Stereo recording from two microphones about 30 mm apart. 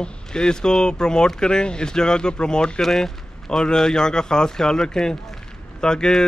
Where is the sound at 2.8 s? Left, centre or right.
Centre.